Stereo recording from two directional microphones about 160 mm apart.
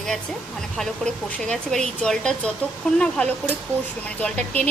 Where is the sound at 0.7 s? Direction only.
5° left (ahead or behind).